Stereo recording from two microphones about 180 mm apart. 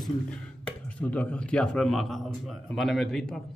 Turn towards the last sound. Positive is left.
turn(degrees=0)  # may be behind; listen again after turning